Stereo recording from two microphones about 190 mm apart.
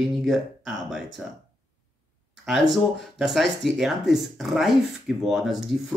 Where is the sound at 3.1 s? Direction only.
Centre (ahead or behind).